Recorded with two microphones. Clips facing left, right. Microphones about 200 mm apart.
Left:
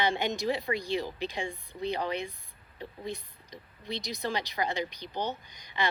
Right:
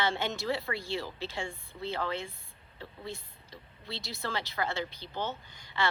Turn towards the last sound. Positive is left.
turn(degrees=15)  # may be behind; listen again after turning